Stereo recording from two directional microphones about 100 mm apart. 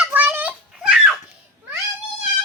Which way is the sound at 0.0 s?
15° right (ahead or behind).